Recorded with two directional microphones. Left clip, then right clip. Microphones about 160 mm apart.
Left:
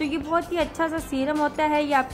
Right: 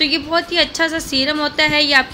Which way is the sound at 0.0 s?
10° right (ahead or behind).